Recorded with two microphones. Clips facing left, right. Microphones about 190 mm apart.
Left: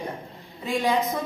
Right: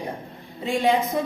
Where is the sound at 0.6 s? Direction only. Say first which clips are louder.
Right 3 dB; 25° right (ahead or behind).